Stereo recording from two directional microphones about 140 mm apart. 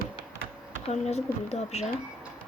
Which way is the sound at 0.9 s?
50° left (ahead or behind).